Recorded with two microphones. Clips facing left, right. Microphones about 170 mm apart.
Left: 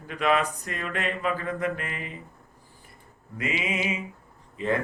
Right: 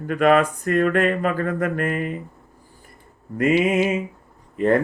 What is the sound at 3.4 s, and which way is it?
Speech, 50° right (ahead or behind).